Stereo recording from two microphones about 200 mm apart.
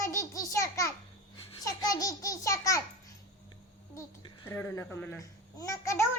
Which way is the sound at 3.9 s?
15° left (ahead or behind).